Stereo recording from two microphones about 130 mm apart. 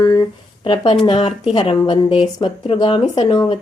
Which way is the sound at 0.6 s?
40° left (ahead or behind).